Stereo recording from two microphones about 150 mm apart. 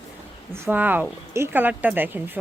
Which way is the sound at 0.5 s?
15° right (ahead or behind).